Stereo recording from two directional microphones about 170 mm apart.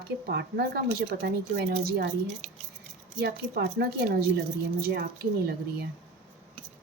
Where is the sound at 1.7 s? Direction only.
55° right (ahead or behind).